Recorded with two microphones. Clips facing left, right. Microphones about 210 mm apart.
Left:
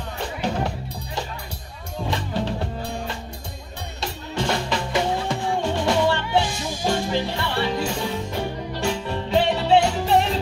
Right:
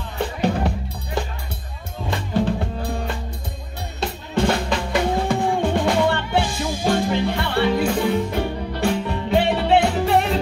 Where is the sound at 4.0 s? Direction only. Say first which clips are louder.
Right 6 dB; 55° right (ahead or behind).